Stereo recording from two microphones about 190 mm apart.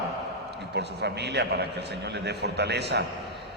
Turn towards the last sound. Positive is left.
turn(degrees=-60)  # may be behind; listen again after turning